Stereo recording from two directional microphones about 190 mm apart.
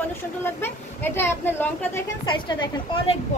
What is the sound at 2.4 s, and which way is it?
Speech, 25° left (ahead or behind).